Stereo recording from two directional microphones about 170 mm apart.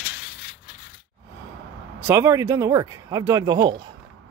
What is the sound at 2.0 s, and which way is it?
Speech, 15° right (ahead or behind).